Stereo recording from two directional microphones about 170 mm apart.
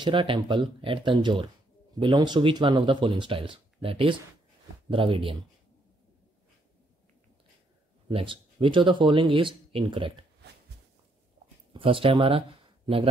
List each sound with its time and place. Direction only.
0.0 s speech: 30° right (ahead or behind)
8.1 s speech: 35° right (ahead or behind)
11.7 s speech: 30° right (ahead or behind)